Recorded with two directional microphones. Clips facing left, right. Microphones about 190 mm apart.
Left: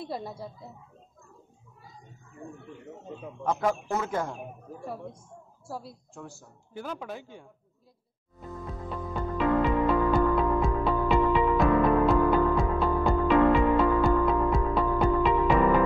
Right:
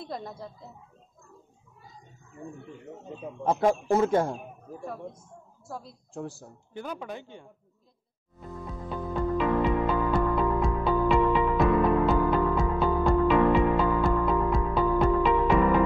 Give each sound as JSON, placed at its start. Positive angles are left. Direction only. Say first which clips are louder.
{"t": 0.0, "sound": "speech", "louder": "left 2 dB", "side_deg": 5}
{"t": 3.4, "sound": "a man's voice", "louder": "right 4 dB", "side_deg": -30}
{"t": 5.7, "sound": "speech", "louder": "left 1 dB", "side_deg": 5}
{"t": 6.1, "sound": "a man's voice", "louder": "right 9 dB", "side_deg": -35}
{"t": 6.7, "sound": "speech", "louder": "even", "side_deg": 5}
{"t": 8.8, "sound": "music", "louder": "right 4 dB", "side_deg": 0}